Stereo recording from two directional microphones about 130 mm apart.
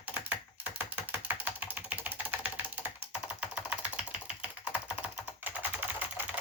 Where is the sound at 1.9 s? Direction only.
10° right (ahead or behind).